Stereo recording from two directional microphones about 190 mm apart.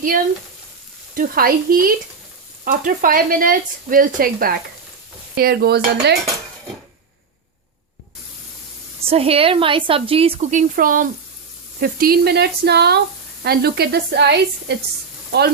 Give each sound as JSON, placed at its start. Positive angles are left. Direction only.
{"t": 1.1, "sound": "speech", "side_deg": -50}
{"t": 9.0, "sound": "a woman's voice", "side_deg": -30}